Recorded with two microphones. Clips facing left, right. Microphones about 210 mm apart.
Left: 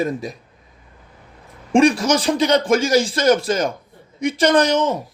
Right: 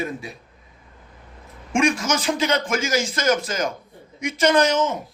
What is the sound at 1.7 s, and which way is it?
A man's voice, 35° left (ahead or behind).